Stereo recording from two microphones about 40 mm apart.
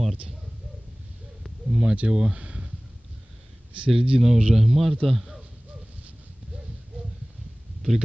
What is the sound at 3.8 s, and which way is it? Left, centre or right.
Speech, centre.